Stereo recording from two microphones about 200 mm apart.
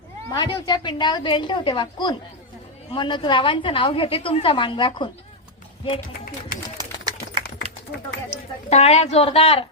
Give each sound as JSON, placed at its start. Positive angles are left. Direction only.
{"t": 0.3, "sound": "a woman's voice", "side_deg": 20}
{"t": 6.5, "sound": "run", "side_deg": -20}
{"t": 7.6, "sound": "a sound", "side_deg": -30}
{"t": 8.7, "sound": "a woman's voice", "side_deg": 30}